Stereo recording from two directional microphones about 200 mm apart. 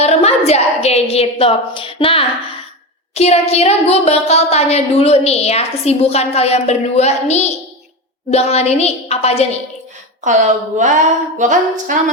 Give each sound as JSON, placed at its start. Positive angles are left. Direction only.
{"t": 0.0, "sound": "a woman's voice", "side_deg": 30}
{"t": 10.8, "sound": "speech", "side_deg": -40}